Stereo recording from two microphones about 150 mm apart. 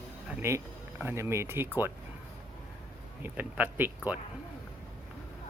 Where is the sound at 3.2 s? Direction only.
10° right (ahead or behind).